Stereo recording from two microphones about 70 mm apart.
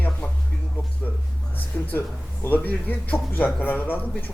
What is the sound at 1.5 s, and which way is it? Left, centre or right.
Speech, left.